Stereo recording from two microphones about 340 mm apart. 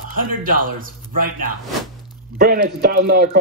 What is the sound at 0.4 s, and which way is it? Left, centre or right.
A man's voice, right.